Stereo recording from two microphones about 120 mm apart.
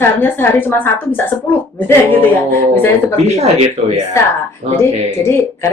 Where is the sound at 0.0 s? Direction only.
20° left (ahead or behind).